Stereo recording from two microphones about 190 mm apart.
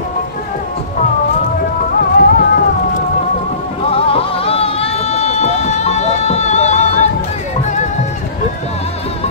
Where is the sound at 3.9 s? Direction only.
30° left (ahead or behind).